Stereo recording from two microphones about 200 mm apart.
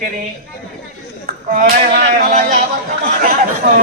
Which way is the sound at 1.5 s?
45° right (ahead or behind).